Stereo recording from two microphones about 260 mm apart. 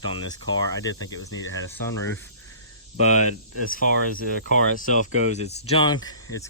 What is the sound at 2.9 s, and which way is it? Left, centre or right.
Speech, left.